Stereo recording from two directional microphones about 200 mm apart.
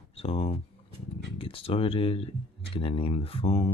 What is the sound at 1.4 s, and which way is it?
Speech, 25° left (ahead or behind).